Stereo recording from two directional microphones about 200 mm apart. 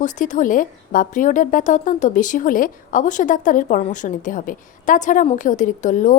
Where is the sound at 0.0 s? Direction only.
40° left (ahead or behind).